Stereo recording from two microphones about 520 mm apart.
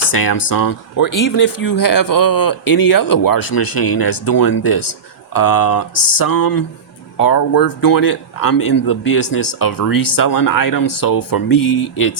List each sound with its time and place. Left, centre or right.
0.0 s speech: left